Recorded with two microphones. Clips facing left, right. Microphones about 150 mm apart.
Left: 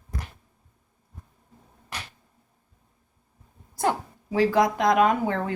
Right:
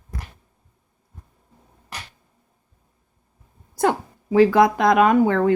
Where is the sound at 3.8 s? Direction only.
80° right.